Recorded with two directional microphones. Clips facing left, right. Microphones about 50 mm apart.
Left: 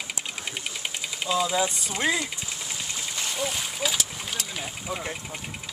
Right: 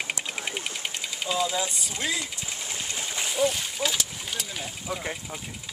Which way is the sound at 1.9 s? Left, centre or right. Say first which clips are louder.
Left 4 dB; left.